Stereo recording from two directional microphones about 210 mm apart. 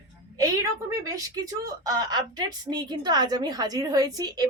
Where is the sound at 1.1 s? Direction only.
15° right (ahead or behind).